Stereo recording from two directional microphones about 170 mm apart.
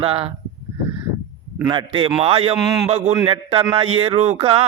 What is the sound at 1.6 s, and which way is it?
Mantra, 25° right (ahead or behind).